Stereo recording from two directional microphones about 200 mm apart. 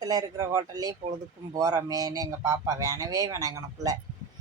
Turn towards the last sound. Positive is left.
turn(degrees=-15)  # may be behind; listen again after turning